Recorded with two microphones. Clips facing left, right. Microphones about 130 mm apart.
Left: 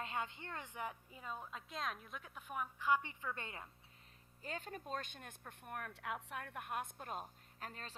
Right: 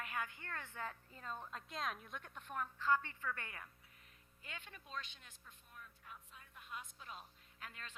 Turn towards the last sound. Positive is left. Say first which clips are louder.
# left 4 dB
turn(degrees=35)  # may be behind; listen again after turning